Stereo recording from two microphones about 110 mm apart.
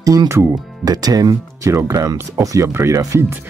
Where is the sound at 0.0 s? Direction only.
35° right (ahead or behind).